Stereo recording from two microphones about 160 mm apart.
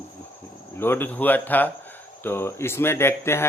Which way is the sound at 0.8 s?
15° left (ahead or behind).